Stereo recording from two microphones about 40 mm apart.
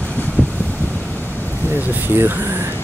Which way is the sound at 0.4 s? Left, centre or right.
Left.